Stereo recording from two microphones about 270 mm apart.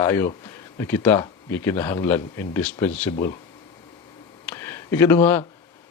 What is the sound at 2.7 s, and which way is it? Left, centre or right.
Speech, centre.